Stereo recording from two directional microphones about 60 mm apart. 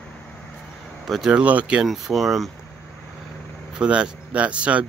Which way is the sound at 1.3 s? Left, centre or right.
Right.